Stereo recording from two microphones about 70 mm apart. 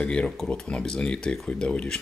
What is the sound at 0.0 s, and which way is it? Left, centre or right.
Speech, centre.